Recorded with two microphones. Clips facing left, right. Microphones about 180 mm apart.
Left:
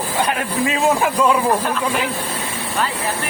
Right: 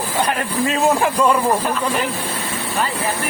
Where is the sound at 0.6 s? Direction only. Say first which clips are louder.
Right 1 dB; centre (ahead or behind).